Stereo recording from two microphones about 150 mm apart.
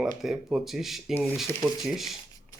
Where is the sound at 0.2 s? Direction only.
Centre (ahead or behind).